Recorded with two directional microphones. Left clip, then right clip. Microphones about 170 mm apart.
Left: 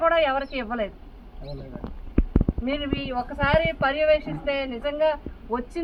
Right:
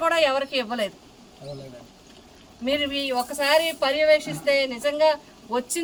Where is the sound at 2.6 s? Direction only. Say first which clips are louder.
Right 10 dB; 30° right (ahead or behind).